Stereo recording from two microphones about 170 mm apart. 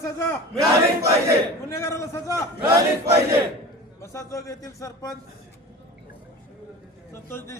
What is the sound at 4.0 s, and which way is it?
Speech, 15° left (ahead or behind).